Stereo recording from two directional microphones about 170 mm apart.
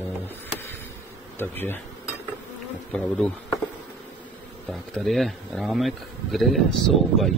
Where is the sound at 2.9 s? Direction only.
5° left (ahead or behind).